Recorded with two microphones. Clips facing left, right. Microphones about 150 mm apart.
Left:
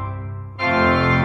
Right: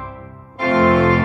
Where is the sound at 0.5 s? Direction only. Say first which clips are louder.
Right 4 dB; 40° right (ahead or behind).